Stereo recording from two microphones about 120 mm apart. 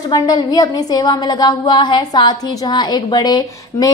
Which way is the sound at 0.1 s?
35° left (ahead or behind).